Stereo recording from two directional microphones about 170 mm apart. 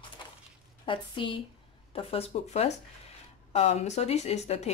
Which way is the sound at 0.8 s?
30° left (ahead or behind).